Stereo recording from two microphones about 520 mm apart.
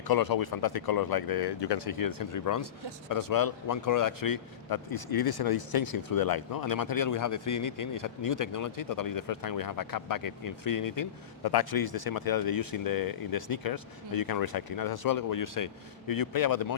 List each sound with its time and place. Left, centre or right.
0.1 s speech: left